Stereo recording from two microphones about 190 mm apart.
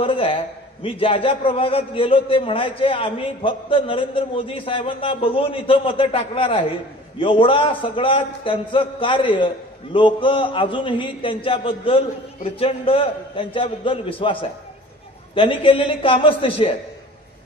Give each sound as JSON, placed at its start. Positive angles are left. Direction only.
{"t": 0.0, "sound": "a man's voice", "side_deg": 30}